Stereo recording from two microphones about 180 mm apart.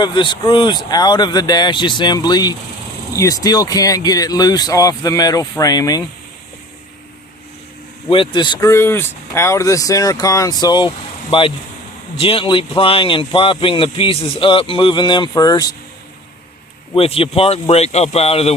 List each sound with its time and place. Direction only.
0.0 s speech: 25° left (ahead or behind)
8.1 s speech: 25° left (ahead or behind)
16.9 s speech: 30° left (ahead or behind)